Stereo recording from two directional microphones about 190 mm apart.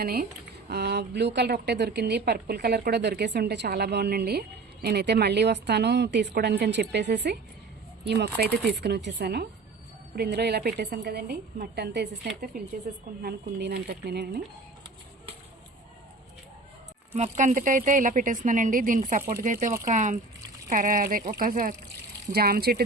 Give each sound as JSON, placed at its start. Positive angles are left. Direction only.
{"t": 0.0, "sound": "speech", "side_deg": -50}
{"t": 17.1, "sound": "speech", "side_deg": -40}